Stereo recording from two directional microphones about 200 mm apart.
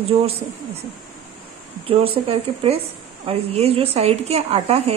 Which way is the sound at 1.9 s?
30° right (ahead or behind).